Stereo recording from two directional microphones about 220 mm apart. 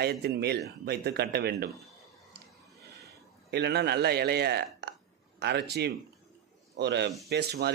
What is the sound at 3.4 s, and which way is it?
A man's voice, 50° right (ahead or behind).